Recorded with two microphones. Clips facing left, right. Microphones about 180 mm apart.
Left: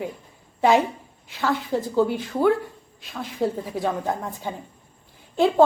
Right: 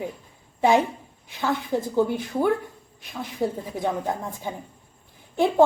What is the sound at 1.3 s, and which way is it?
A woman's voice, 15° right (ahead or behind).